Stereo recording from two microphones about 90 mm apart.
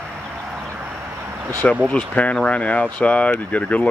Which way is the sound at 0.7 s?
20° right (ahead or behind).